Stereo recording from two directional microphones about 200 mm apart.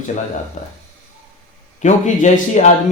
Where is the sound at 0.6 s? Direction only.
35° left (ahead or behind).